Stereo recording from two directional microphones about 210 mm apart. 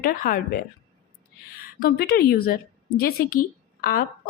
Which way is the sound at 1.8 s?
45° left (ahead or behind).